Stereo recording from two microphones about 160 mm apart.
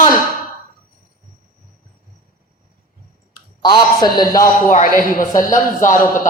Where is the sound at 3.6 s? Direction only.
25° left (ahead or behind).